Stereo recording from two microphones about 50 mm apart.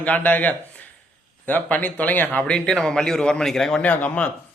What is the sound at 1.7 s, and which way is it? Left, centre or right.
Speech, left.